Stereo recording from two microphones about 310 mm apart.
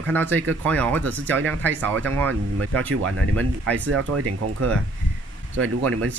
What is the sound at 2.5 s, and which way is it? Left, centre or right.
Speech, right.